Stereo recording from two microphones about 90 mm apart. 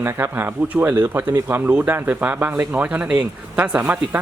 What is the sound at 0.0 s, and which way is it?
Speech, 25° right (ahead or behind).